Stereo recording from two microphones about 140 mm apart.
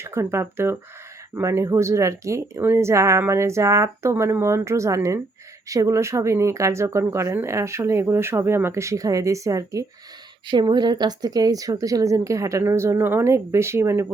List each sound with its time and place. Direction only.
0.0 s speech: 20° right (ahead or behind)